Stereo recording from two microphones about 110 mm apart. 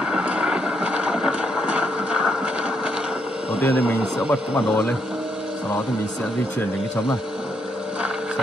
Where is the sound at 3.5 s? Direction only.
20° left (ahead or behind).